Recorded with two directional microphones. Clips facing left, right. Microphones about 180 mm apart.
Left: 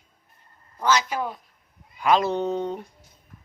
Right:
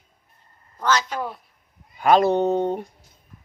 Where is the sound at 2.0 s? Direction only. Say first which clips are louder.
Right 4 dB; 55° right (ahead or behind).